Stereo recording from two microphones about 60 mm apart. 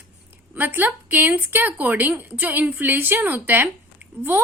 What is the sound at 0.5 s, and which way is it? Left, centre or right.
A woman's voice, right.